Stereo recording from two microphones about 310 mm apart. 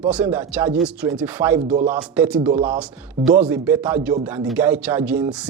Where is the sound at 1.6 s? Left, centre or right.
Right.